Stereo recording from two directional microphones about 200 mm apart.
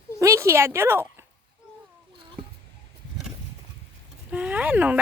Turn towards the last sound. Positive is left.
turn(degrees=-10)  # may be behind; listen again after turning